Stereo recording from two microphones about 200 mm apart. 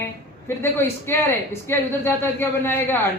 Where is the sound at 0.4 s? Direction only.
10° left (ahead or behind).